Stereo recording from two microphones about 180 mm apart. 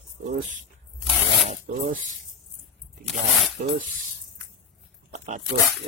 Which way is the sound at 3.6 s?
50° right (ahead or behind).